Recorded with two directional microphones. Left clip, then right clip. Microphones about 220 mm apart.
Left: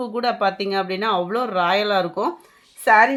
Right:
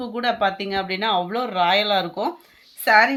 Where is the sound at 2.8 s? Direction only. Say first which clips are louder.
Left 1 dB; 40° left (ahead or behind).